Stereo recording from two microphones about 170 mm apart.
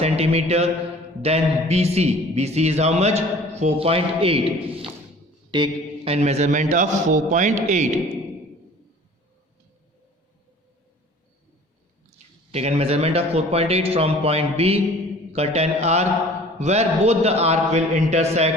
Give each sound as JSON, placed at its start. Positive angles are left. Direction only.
{"t": 0.0, "sound": "a man's voice", "side_deg": -40}
{"t": 12.5, "sound": "a man's voice", "side_deg": -40}